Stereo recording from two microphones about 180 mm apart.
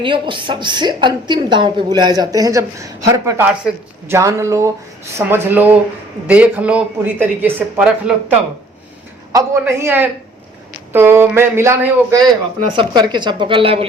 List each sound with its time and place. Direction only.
0.0 s a woman's voice: 25° right (ahead or behind); by 8.1 s 10° right (ahead or behind)
9.3 s speech: 15° right (ahead or behind)
12.7 s a woman's voice: 25° right (ahead or behind)